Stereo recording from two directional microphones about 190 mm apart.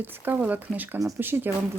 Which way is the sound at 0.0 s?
10° right (ahead or behind).